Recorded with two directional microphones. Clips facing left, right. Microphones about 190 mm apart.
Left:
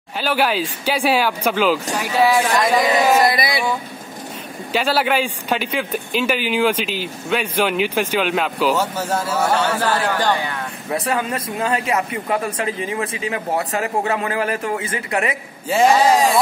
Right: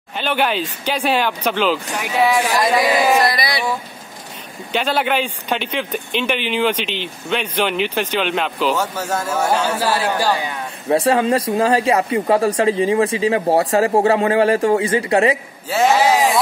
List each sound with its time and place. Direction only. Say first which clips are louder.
0.2 s speech: even; 5° left (ahead or behind)
4.7 s speech: even; 5° left (ahead or behind)
9.3 s a man's voice: right 1 dB; 10° right (ahead or behind)
10.9 s speech: right 7 dB; 30° right (ahead or behind)
15.8 s speech: even; 5° right (ahead or behind)